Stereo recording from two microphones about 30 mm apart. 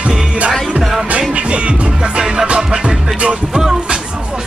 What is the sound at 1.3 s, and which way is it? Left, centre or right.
Music, right.